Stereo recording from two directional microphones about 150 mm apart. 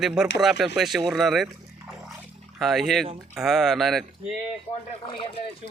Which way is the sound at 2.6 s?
Centre (ahead or behind).